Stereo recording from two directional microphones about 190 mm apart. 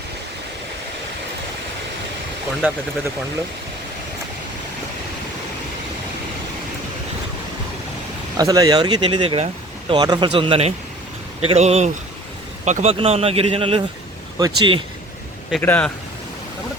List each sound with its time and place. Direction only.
2.6 s speech: 10° right (ahead or behind)
8.4 s speech: 20° right (ahead or behind)
15.6 s a man's voice: 10° left (ahead or behind)